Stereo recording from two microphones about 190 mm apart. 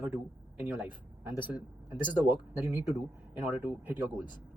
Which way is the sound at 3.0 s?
5° right (ahead or behind).